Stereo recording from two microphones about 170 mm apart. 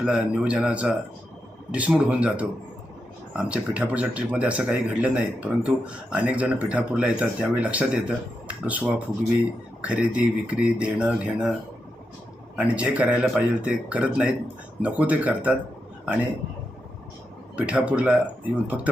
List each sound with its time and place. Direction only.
0.0 s speech: 5° right (ahead or behind)
12.5 s speech: 5° right (ahead or behind)
17.6 s speech: 5° right (ahead or behind)